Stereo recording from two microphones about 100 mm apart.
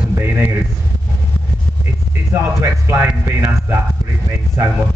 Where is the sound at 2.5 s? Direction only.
25° right (ahead or behind).